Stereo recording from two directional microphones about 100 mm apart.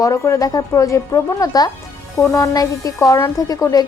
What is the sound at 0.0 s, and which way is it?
A woman's voice, 35° left (ahead or behind).